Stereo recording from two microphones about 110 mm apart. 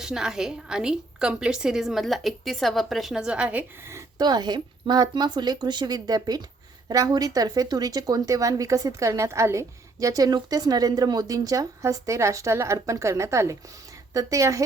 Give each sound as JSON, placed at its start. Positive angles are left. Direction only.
{"t": 0.0, "sound": "a woman's voice", "side_deg": -5}
{"t": 4.2, "sound": "a woman's voice", "side_deg": -40}